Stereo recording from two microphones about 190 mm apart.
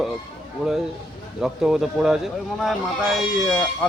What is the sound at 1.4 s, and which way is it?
Speech, centre (ahead or behind).